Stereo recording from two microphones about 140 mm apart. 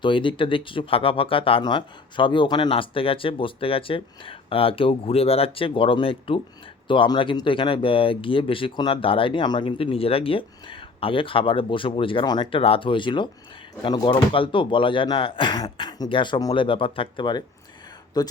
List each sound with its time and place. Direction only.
0.0 s speech: 35° left (ahead or behind)